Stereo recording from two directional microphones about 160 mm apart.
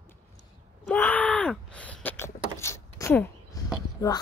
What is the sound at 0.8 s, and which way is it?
Groan, 10° left (ahead or behind).